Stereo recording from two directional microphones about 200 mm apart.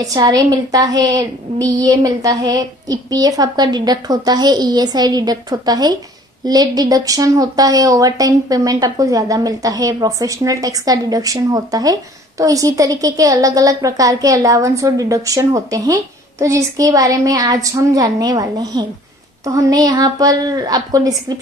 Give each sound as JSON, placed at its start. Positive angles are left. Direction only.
{"t": 0.0, "sound": "a woman's voice", "side_deg": -20}